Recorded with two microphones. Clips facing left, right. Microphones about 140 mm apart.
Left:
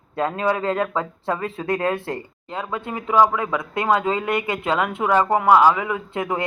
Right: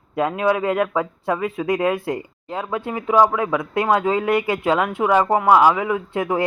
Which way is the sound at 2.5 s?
5° right (ahead or behind).